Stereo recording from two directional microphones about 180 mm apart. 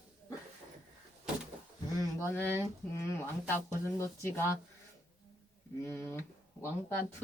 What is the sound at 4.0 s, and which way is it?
Speech, 15° left (ahead or behind).